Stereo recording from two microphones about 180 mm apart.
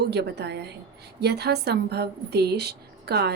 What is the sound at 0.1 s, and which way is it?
A woman's voice, 65° right (ahead or behind).